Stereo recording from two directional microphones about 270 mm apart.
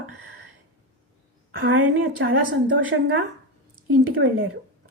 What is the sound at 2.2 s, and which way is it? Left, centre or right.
Speech, right.